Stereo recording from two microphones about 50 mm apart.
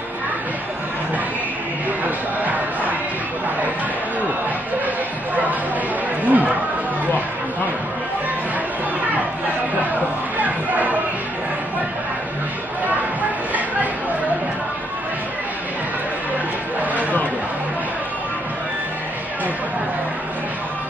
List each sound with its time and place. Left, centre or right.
2.0 s music: right
4.8 s bow-wow: right
6.2 s chatter: right
10.4 s music: right
12.8 s a sound: right